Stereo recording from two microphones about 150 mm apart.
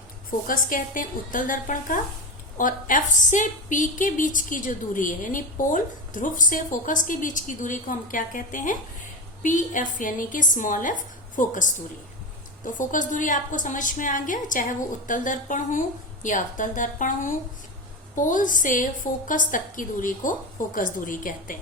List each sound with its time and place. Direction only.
0.3 s a woman's voice: 65° left (ahead or behind)
12.8 s a woman's voice: 60° left (ahead or behind)